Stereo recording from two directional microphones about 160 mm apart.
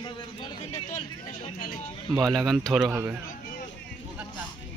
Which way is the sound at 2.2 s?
Centre (ahead or behind).